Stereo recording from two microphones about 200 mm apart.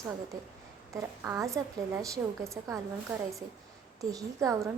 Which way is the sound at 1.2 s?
15° right (ahead or behind).